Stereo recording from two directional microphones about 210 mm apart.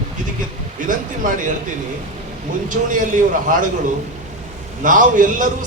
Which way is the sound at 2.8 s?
40° right (ahead or behind).